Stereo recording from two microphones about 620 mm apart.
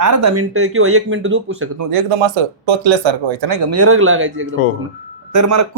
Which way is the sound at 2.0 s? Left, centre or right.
Right.